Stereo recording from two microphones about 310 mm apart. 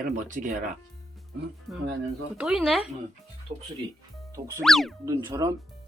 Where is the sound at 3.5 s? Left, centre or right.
Right.